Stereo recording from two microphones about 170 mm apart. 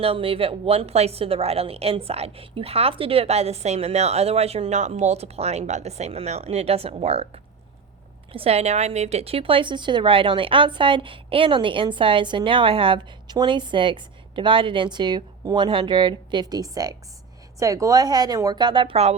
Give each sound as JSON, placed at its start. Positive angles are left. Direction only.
{"t": 0.0, "sound": "a woman's voice", "side_deg": -35}
{"t": 8.3, "sound": "speech", "side_deg": -35}